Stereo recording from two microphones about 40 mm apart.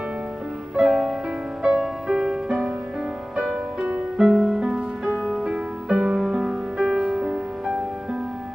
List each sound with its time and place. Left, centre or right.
0.7 s music: centre
1.6 s music: right
2.0 s music: centre
4.2 s music: centre
5.0 s music: centre